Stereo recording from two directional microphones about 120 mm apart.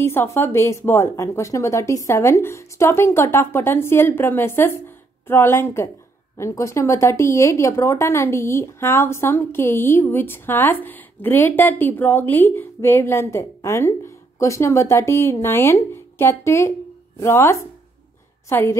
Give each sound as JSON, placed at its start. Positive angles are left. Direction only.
{"t": 0.0, "sound": "speech", "side_deg": 20}